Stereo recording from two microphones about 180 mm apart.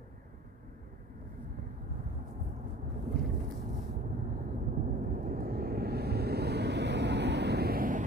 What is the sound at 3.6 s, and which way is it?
Vehicle, 40° right (ahead or behind).